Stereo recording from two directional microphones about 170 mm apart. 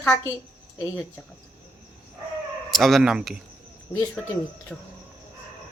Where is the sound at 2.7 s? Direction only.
Centre (ahead or behind).